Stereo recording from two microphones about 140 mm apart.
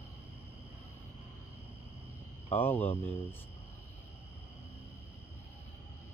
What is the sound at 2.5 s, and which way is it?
Speech, 15° left (ahead or behind).